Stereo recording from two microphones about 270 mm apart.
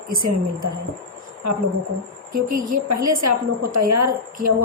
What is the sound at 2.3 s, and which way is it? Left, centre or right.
A woman's voice, right.